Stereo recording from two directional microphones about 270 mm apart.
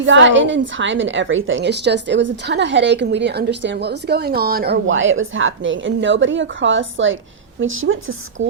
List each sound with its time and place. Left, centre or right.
0.0 s a woman's voice: right